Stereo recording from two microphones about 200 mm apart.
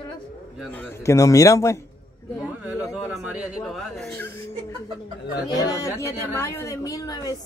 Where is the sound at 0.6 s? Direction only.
10° left (ahead or behind).